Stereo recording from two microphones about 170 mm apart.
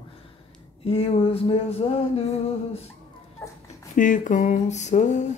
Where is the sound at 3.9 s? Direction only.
50° left (ahead or behind).